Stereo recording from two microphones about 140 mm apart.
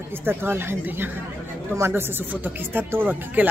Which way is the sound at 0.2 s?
15° right (ahead or behind).